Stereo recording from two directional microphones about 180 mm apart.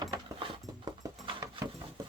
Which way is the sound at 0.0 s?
25° right (ahead or behind).